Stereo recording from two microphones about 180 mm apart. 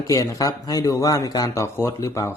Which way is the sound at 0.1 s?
15° left (ahead or behind).